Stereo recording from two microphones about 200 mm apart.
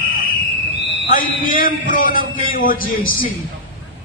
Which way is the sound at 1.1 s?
45° left (ahead or behind).